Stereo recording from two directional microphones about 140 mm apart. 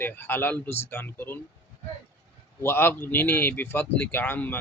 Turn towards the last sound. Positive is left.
turn(degrees=15)  # may be behind; listen again after turning